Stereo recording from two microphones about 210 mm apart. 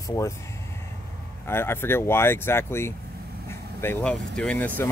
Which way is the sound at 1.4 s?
10° left (ahead or behind).